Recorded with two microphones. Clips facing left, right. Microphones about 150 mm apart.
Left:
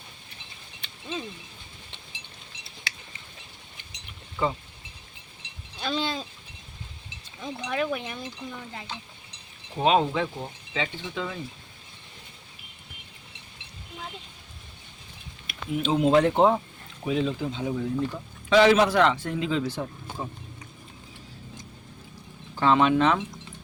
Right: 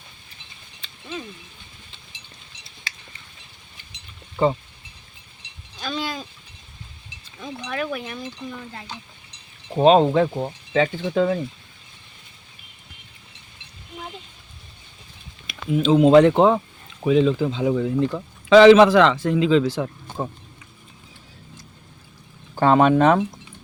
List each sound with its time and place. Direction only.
4.4 s speech: 30° right (ahead or behind)
5.8 s a sound: 25° left (ahead or behind)
7.7 s speech: 20° left (ahead or behind)
8.4 s speech: 5° left (ahead or behind)
9.7 s speech: 40° right (ahead or behind)
15.4 s a man's voice: 90° right
20.2 s speech: 50° right (ahead or behind)
22.5 s speech: 45° right (ahead or behind)